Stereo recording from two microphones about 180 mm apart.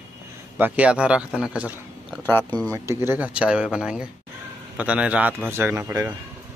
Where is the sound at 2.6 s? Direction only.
15° right (ahead or behind).